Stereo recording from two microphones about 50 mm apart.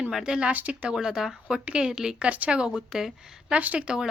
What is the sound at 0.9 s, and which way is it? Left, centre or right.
Speech, centre.